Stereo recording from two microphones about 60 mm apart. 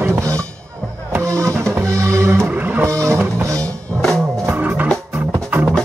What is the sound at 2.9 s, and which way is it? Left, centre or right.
Music, right.